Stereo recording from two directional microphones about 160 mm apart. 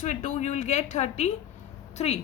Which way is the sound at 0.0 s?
50° left (ahead or behind).